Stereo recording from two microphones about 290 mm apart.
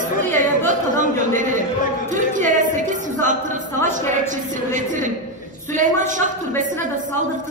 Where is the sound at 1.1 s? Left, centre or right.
Right.